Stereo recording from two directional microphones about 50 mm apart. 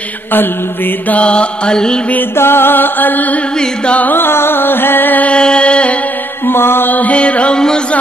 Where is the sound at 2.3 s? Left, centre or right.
Left.